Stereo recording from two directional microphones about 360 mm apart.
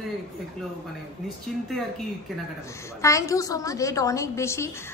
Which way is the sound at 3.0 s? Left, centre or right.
Centre.